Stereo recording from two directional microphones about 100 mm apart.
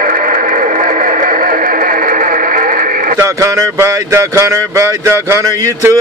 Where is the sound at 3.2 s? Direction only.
30° right (ahead or behind).